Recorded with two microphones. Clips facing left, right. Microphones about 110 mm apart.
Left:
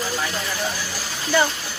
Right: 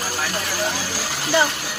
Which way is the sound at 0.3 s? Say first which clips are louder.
Right 2 dB; 80° right.